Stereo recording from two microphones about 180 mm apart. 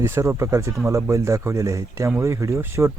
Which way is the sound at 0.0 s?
15° right (ahead or behind).